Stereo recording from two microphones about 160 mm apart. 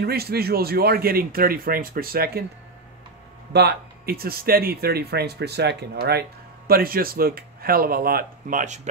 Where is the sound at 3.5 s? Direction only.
80° right; by 8.7 s 55° right (ahead or behind).